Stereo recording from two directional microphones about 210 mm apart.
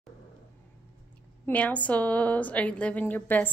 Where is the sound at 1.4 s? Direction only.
5° left (ahead or behind).